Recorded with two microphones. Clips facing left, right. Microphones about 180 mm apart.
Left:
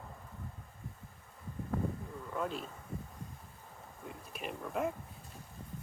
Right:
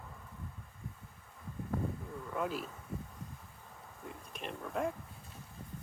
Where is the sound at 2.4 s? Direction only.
5° right (ahead or behind).